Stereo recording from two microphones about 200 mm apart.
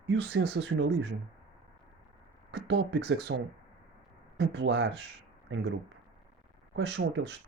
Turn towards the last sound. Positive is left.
turn(degrees=-60)  # may be behind; listen again after turning